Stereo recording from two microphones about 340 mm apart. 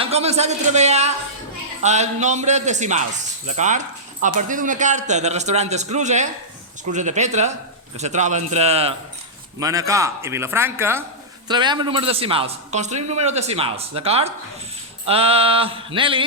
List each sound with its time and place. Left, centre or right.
0.0 s a man's voice: centre